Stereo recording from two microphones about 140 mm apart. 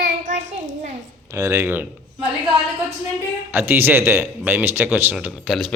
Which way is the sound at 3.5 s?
15° right (ahead or behind).